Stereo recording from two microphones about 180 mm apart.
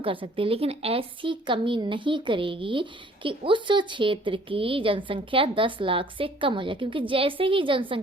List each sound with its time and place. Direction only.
0.0 s a woman's voice: 30° right (ahead or behind)